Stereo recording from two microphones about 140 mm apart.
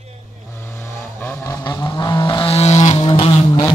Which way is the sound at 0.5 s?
15° left (ahead or behind).